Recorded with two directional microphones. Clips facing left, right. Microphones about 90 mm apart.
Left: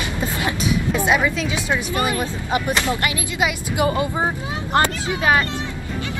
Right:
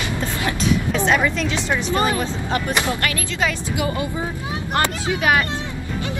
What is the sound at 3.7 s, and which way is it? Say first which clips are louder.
Speech: left 3 dB; 25° left (ahead or behind).